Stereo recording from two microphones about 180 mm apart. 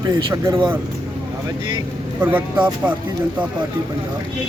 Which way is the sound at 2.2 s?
10° right (ahead or behind).